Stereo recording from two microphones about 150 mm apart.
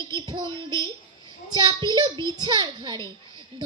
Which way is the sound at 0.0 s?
30° right (ahead or behind).